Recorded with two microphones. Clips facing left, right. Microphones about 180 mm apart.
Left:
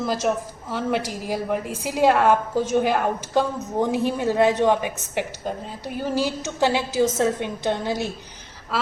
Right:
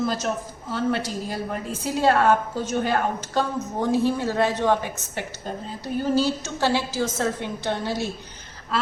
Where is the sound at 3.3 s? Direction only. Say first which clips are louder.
Left 3 dB; 15° left (ahead or behind).